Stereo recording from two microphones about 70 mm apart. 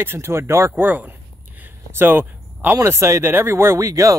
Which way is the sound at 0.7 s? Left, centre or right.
Right.